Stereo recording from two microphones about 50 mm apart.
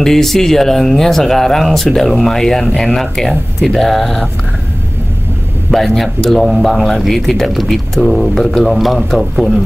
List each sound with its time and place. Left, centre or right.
0.0 s speech: centre
5.7 s speech: centre